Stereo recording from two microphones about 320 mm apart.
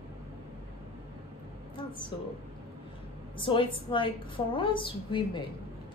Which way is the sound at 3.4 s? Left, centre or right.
Centre.